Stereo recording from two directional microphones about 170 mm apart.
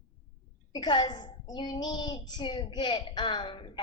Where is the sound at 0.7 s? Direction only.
25° left (ahead or behind).